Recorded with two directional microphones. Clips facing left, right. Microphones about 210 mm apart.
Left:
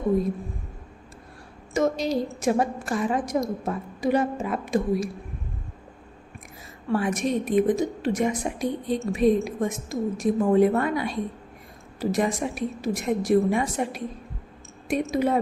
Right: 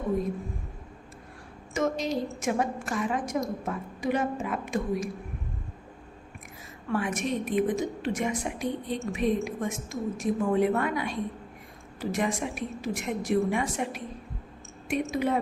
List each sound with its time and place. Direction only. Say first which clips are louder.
1.7 s a woman's voice: left 4 dB; 35° left (ahead or behind)
6.8 s a woman's voice: left 5 dB; 35° left (ahead or behind)